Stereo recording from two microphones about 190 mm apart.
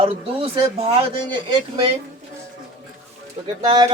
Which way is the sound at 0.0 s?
30° right (ahead or behind).